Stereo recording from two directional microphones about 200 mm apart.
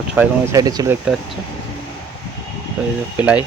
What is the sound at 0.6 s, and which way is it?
Speech, 20° right (ahead or behind).